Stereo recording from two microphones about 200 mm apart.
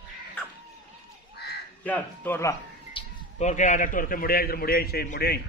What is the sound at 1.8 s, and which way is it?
Speech, 10° left (ahead or behind).